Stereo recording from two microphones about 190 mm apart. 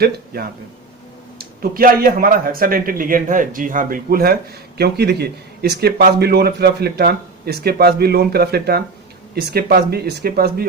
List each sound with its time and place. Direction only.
1.4 s speech: 50° right (ahead or behind)